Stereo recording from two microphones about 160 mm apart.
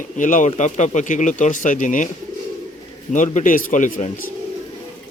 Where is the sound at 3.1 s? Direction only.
50° left (ahead or behind).